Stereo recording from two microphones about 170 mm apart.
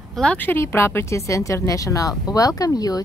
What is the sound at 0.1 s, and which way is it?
A woman's voice, 5° left (ahead or behind).